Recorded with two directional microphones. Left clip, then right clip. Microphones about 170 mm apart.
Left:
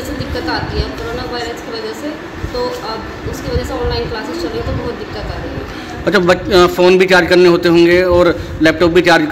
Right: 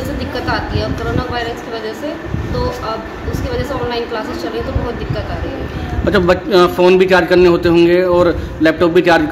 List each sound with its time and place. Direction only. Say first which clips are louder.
6.0 s a man's voice: left 1 dB; centre (ahead or behind)